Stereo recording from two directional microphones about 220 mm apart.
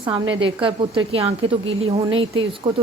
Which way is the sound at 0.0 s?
20° right (ahead or behind).